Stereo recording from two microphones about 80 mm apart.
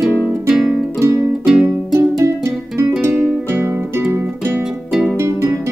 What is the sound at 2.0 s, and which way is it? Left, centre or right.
Music, right.